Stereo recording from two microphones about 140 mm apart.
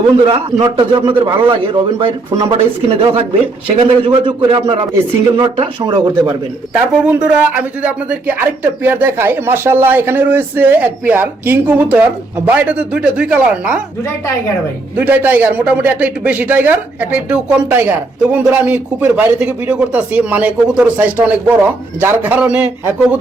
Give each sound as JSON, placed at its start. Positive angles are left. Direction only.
{"t": 0.3, "sound": "a man's voice", "side_deg": -35}
{"t": 6.9, "sound": "a man's voice", "side_deg": -10}
{"t": 14.9, "sound": "a man's voice", "side_deg": -10}